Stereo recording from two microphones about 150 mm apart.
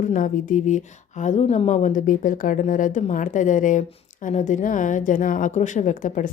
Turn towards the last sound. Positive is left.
turn(degrees=55)  # may be behind; listen again after turning